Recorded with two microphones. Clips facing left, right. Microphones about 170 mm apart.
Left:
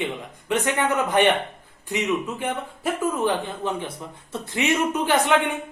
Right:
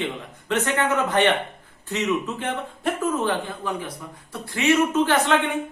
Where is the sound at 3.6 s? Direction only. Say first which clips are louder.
Left 1 dB; 25° left (ahead or behind).